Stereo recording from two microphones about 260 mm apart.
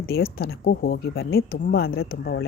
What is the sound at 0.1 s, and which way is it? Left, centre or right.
Speech, left.